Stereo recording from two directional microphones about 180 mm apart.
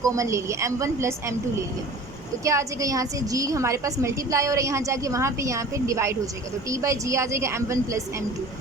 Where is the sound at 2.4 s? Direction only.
15° right (ahead or behind).